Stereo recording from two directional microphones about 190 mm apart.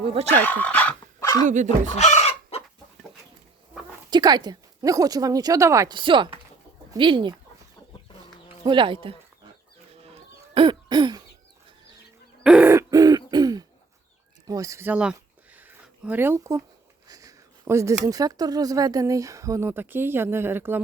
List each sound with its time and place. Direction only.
0.0 s speech: 30° right (ahead or behind)
0.3 s speech: 10° left (ahead or behind)
1.5 s speech: 40° right (ahead or behind)
2.0 s chicken: 35° left (ahead or behind)
4.1 s speech: 20° right (ahead or behind)
8.6 s speech: 25° right (ahead or behind)
10.5 s cough: 25° right (ahead or behind)
12.4 s hoot: 5° right (ahead or behind)
14.4 s speech: 20° right (ahead or behind)
15.5 s a sound: 10° right (ahead or behind)
17.1 s speech: 15° right (ahead or behind)